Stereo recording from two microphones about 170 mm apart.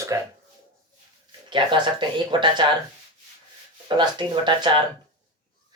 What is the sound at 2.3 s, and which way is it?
Speech, 25° right (ahead or behind).